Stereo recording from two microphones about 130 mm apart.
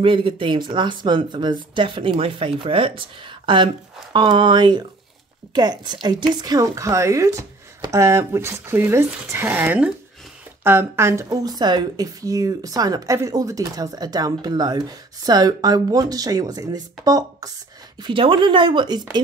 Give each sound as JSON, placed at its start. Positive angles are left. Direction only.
{"t": 0.0, "sound": "a woman's voice", "side_deg": -40}
{"t": 18.0, "sound": "speech", "side_deg": -40}